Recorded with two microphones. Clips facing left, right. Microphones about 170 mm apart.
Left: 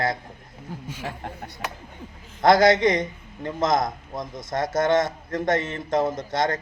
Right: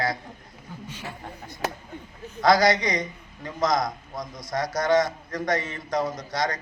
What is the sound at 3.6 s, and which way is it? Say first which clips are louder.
A man's voice: left 1 dB; 25° left (ahead or behind).